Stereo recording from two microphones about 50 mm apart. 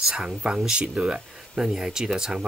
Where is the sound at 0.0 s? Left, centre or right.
Centre.